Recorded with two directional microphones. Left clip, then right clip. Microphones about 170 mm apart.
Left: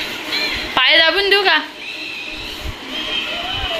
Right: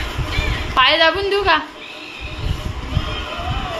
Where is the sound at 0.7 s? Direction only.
Centre (ahead or behind).